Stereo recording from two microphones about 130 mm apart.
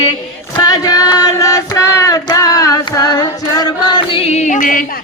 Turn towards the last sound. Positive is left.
turn(degrees=85)